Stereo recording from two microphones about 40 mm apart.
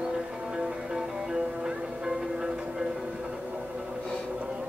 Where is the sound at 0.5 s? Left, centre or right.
Centre.